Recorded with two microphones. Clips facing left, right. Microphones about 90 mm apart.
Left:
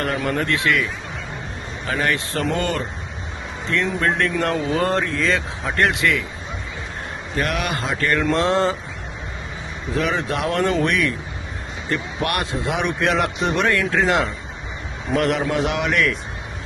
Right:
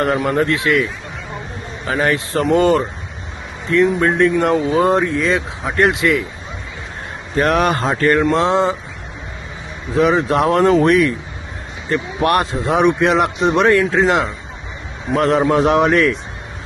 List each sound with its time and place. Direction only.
0.0 s a man's voice: 25° right (ahead or behind)
1.9 s a man's voice: 25° right (ahead or behind)
3.7 s a man's voice: 15° right (ahead or behind)
7.3 s a man's voice: 35° right (ahead or behind); by 8.7 s 20° right (ahead or behind)
9.9 s a man's voice: 25° right (ahead or behind)